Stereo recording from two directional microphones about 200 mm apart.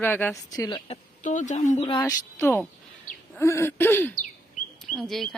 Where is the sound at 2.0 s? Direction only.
15° left (ahead or behind).